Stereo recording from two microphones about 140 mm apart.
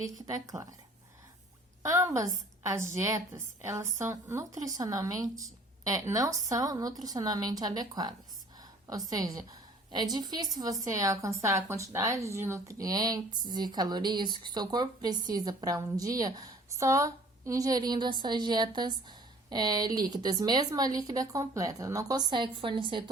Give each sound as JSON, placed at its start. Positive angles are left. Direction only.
{"t": 0.0, "sound": "a woman's voice", "side_deg": -25}
{"t": 1.8, "sound": "a woman's voice", "side_deg": -20}